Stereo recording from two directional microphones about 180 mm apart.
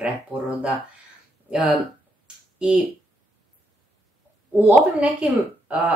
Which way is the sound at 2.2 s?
5° right (ahead or behind).